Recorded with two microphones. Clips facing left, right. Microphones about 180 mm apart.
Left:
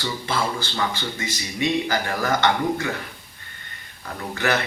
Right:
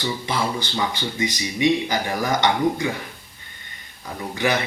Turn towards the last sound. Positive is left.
turn(degrees=-15)  # may be behind; listen again after turning